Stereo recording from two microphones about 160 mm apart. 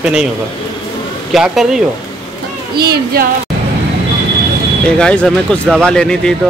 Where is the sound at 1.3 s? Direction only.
5° right (ahead or behind).